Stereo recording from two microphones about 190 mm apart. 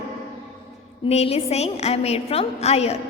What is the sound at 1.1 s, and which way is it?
A woman's voice, 30° left (ahead or behind).